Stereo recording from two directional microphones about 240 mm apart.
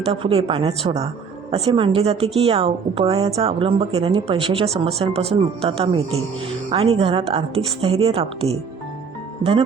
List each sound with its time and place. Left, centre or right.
0.0 s a woman's voice: right